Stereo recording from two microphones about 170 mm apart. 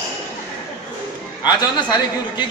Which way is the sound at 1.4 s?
25° left (ahead or behind).